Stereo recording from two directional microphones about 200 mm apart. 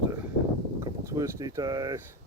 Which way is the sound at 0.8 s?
15° right (ahead or behind).